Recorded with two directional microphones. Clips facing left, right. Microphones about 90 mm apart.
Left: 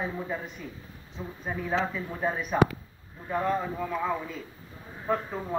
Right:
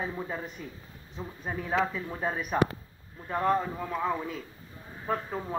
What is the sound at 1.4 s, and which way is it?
Speech, 15° right (ahead or behind).